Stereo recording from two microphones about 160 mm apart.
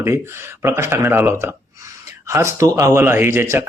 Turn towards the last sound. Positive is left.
turn(degrees=-15)  # may be behind; listen again after turning